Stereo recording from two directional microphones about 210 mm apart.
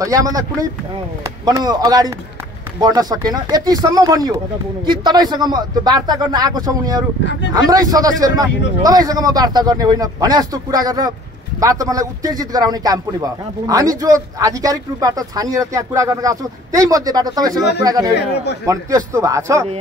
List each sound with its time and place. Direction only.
0.0 s a man's voice: 15° right (ahead or behind)
18.1 s speech: 55° left (ahead or behind)
18.7 s a man's voice: 15° right (ahead or behind)